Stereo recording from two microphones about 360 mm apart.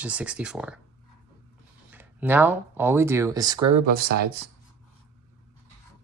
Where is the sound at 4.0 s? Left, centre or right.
Right.